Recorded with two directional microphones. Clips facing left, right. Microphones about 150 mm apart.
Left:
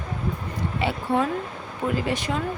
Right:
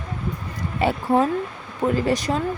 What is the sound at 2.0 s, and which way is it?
Speech, 40° right (ahead or behind).